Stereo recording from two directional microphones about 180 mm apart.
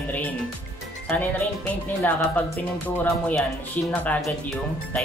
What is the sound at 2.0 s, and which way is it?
Speech, 10° left (ahead or behind).